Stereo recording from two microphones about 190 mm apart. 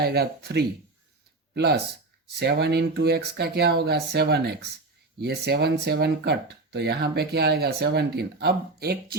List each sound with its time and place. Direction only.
0.0 s speech: 55° right (ahead or behind)